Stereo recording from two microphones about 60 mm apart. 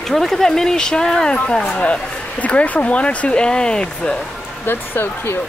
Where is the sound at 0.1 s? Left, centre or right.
Centre.